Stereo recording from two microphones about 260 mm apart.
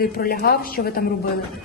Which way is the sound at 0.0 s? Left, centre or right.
Left.